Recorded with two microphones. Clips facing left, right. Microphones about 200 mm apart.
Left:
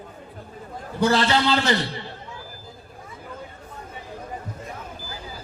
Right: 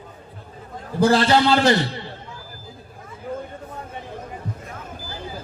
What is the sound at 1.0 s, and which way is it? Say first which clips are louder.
Speech: right 4 dB; 35° right (ahead or behind).